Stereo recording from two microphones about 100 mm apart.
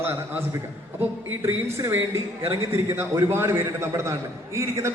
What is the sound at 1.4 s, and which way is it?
A man's voice, 30° right (ahead or behind).